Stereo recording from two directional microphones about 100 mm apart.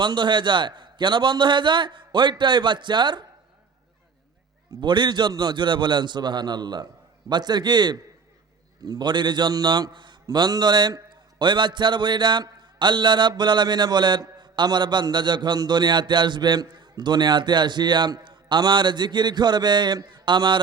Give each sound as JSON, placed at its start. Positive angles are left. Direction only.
{"t": 0.0, "sound": "a man's voice", "side_deg": -50}
{"t": 4.8, "sound": "a man's voice", "side_deg": -50}